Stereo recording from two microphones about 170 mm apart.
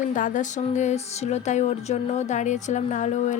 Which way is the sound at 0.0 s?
50° left (ahead or behind).